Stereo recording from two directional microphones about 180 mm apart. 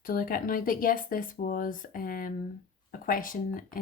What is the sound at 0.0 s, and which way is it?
Speech, 50° left (ahead or behind).